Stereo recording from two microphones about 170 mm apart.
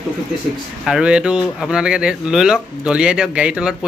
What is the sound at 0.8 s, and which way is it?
Speech, 5° right (ahead or behind).